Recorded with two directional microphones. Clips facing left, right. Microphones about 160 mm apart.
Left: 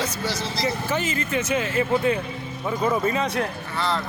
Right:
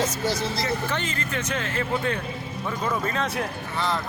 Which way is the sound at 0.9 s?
5° left (ahead or behind).